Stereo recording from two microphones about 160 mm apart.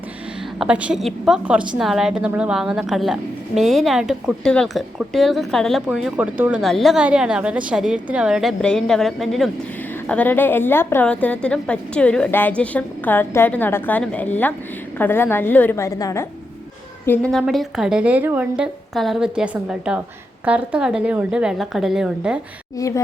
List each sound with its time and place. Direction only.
0.6 s a woman's voice: 5° right (ahead or behind); by 16.2 s 20° left (ahead or behind)
17.1 s a woman's voice: 5° left (ahead or behind)
22.8 s speech: 20° left (ahead or behind)